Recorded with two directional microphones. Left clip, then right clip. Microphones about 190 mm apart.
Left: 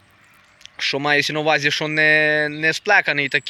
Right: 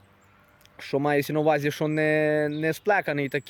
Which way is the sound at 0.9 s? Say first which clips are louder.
Left 5 dB; 15° right (ahead or behind).